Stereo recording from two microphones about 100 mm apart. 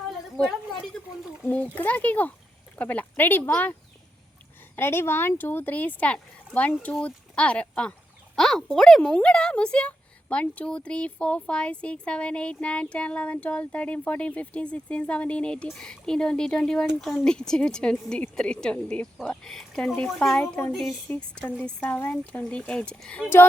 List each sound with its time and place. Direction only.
0.1 s a sound: centre (ahead or behind)
1.5 s speech: 15° left (ahead or behind)
4.8 s speech: 25° left (ahead or behind)